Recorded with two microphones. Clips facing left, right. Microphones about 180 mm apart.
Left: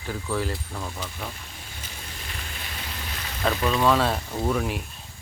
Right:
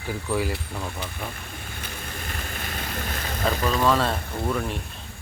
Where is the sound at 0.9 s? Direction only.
60° right (ahead or behind).